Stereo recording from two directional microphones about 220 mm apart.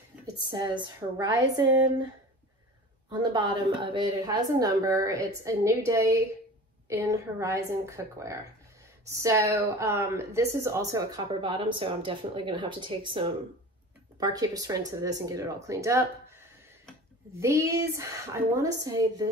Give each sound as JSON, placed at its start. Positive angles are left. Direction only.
{"t": 0.5, "sound": "a woman's voice", "side_deg": -20}
{"t": 3.2, "sound": "a woman's voice", "side_deg": -20}